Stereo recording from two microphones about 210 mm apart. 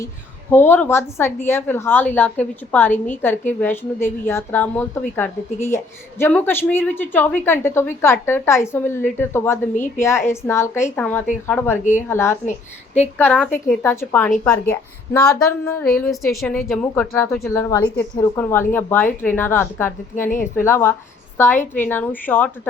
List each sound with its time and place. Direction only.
0.5 s a woman's voice: 10° left (ahead or behind)
12.5 s speech: 30° left (ahead or behind)
13.1 s a woman's voice: 5° left (ahead or behind)